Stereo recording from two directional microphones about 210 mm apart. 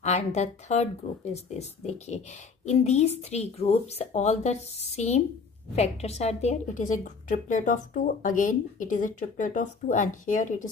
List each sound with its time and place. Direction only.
0.0 s speech: 30° left (ahead or behind)